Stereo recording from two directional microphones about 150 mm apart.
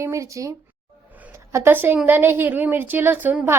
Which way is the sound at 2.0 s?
15° right (ahead or behind).